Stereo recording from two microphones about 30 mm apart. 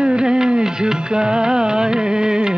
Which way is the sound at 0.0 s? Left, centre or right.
Right.